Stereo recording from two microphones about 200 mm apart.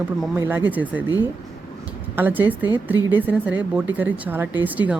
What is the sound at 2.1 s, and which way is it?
Speech, 10° right (ahead or behind).